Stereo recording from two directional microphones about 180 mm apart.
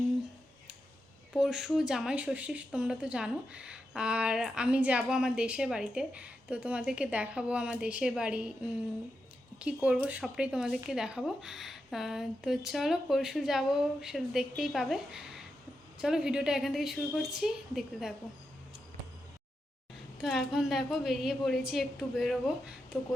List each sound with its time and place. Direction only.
1.3 s speech: centre (ahead or behind)
9.6 s speech: 5° right (ahead or behind)
20.1 s speech: centre (ahead or behind)